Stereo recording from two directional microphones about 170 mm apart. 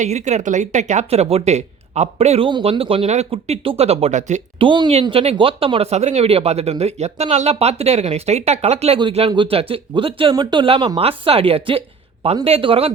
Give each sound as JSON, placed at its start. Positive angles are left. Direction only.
{"t": 0.0, "sound": "speech", "side_deg": -45}
{"t": 4.6, "sound": "speech", "side_deg": -30}